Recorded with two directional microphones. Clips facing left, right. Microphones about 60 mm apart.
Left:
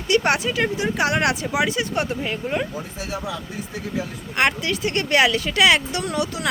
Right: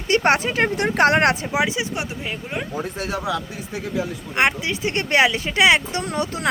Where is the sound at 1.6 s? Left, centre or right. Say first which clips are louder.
Left 2 dB; centre.